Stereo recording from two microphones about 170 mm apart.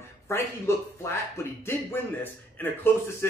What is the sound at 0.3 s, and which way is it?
Speech, 15° left (ahead or behind).